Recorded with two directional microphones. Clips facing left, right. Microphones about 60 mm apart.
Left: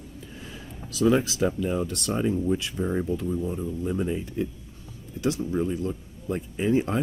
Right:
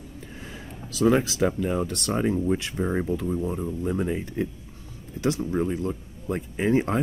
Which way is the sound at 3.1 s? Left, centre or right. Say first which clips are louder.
Right 1 dB; right.